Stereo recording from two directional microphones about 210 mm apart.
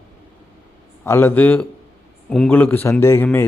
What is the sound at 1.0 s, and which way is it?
Speech, 10° left (ahead or behind).